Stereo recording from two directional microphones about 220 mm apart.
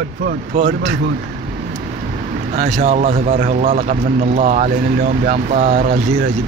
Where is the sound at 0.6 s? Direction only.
35° right (ahead or behind).